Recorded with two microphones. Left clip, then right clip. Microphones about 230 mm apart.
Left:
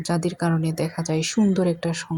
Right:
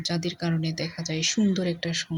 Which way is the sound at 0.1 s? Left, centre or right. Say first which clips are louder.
Left 5 dB; centre.